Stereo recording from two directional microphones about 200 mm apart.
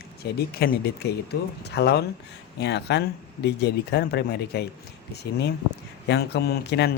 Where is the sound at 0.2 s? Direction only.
50° left (ahead or behind).